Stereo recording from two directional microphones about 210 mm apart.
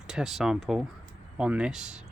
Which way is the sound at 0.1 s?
Centre (ahead or behind).